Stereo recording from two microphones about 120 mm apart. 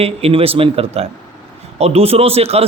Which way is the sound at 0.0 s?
55° right (ahead or behind).